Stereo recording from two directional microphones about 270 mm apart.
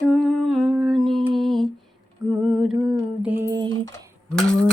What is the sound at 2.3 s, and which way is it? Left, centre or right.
Lullaby, centre.